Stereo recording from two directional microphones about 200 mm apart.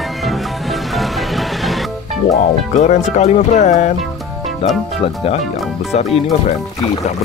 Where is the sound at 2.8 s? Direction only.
35° left (ahead or behind).